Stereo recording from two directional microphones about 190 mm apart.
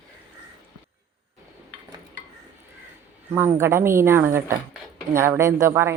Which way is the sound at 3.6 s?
15° right (ahead or behind).